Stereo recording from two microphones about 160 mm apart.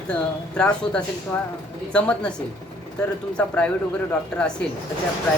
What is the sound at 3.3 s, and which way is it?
Speech, 5° left (ahead or behind).